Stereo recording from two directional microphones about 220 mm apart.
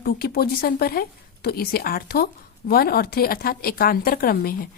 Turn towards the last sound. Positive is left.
turn(degrees=40)  # may be behind; listen again after turning